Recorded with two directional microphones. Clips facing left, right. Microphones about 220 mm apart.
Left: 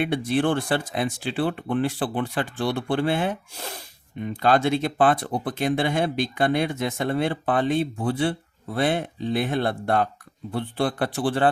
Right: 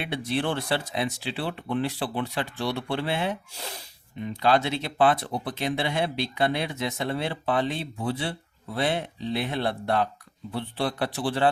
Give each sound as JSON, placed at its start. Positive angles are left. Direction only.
{"t": 0.0, "sound": "speech", "side_deg": 50}